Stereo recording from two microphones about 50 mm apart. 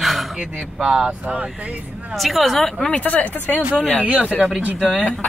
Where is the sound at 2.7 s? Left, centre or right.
Left.